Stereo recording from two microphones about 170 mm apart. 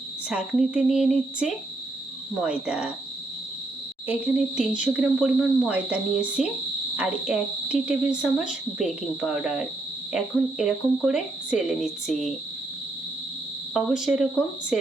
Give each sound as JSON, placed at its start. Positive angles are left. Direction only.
{"t": 0.3, "sound": "speech", "side_deg": -5}
{"t": 4.0, "sound": "speech", "side_deg": -10}
{"t": 13.7, "sound": "speech", "side_deg": -5}